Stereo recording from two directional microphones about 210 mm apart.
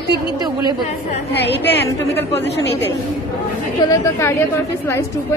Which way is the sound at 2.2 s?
10° left (ahead or behind).